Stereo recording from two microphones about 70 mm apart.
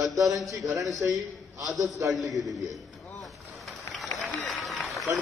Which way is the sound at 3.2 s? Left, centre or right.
Centre.